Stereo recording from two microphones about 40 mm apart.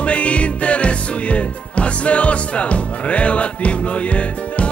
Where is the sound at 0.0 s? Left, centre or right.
Left.